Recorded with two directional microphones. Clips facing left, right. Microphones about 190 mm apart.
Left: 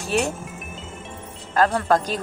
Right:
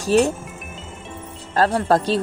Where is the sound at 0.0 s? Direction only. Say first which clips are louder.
Right 7 dB; 35° right (ahead or behind).